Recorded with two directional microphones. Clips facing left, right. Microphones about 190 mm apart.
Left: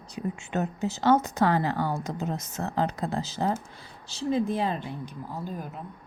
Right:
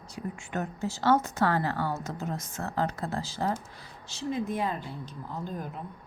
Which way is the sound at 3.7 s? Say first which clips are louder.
Left 3 dB; 30° left (ahead or behind).